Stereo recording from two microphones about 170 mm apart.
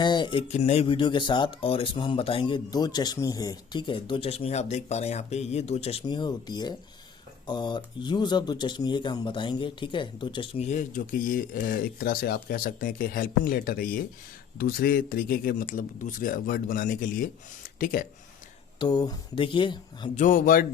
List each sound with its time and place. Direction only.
0.0 s speech: 25° left (ahead or behind)
0.4 s speech: 40° left (ahead or behind)
18.8 s speech: 25° left (ahead or behind)
20.1 s speech: 50° left (ahead or behind)